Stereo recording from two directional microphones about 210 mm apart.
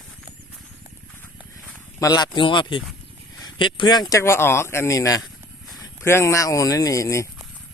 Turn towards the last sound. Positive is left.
turn(degrees=15)  # may be behind; listen again after turning